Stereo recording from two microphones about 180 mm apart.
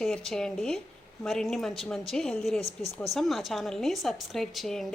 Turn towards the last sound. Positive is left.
turn(degrees=0)  # may be behind; listen again after turning